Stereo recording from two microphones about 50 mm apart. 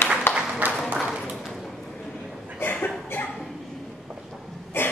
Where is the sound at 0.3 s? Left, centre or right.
Left.